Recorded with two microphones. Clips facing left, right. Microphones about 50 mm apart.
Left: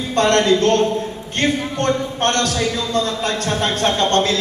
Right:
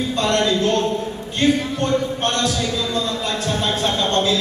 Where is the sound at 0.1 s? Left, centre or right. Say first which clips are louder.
Left 6 dB; left.